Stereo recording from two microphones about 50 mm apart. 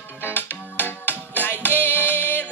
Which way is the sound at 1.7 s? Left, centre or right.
Left.